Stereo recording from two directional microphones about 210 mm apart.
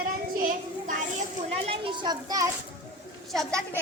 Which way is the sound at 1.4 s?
25° right (ahead or behind).